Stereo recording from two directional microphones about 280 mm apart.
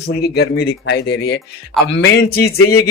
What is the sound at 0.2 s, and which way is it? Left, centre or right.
Speech, left.